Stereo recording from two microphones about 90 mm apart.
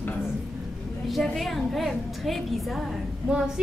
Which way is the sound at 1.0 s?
Centre (ahead or behind).